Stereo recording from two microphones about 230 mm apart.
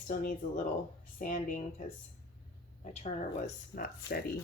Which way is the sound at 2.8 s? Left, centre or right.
Left.